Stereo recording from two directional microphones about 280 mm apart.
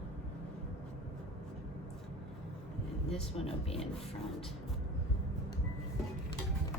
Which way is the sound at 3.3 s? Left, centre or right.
Left.